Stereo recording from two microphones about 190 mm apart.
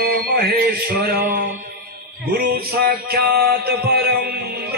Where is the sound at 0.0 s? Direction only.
50° right (ahead or behind).